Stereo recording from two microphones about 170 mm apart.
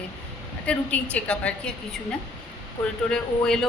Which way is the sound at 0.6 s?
10° left (ahead or behind).